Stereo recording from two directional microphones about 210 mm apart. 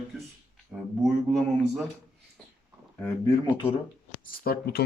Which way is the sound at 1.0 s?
Centre (ahead or behind).